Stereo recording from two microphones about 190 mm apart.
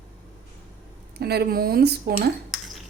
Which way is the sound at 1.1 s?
55° right (ahead or behind).